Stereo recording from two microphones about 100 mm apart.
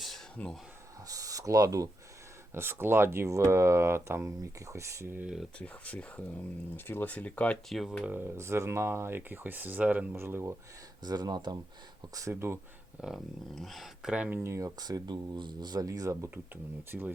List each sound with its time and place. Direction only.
0.3 s speech: 5° left (ahead or behind)
1.0 s speech: 35° right (ahead or behind)
2.5 s speech: 25° right (ahead or behind)
5.2 s speech: centre (ahead or behind)
5.5 s speech: 15° left (ahead or behind)
7.7 s speech: centre (ahead or behind)
8.0 s speech: 20° right (ahead or behind)
11.0 s speech: 45° right (ahead or behind)
12.1 s speech: 30° right (ahead or behind)
13.0 s speech: 10° right (ahead or behind)
13.6 s speech: centre (ahead or behind); by 16.3 s 30° right (ahead or behind)
16.9 s speech: 10° right (ahead or behind)